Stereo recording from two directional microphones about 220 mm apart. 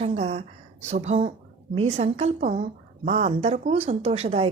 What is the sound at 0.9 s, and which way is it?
A woman's voice, 30° right (ahead or behind).